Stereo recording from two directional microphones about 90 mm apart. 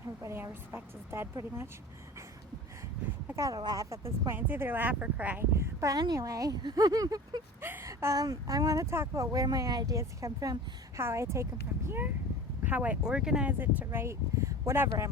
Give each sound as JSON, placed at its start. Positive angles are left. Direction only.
{"t": 0.2, "sound": "speech", "side_deg": -30}
{"t": 3.3, "sound": "speech", "side_deg": -40}
{"t": 3.8, "sound": "speech", "side_deg": -30}
{"t": 5.5, "sound": "speech", "side_deg": -35}
{"t": 7.6, "sound": "a sound", "side_deg": -25}
{"t": 7.9, "sound": "speech", "side_deg": -40}
{"t": 13.5, "sound": "speech", "side_deg": -20}